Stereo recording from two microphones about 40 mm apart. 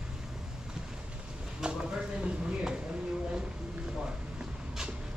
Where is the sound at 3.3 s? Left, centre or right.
Centre.